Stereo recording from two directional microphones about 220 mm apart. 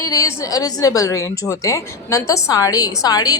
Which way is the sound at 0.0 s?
15° left (ahead or behind).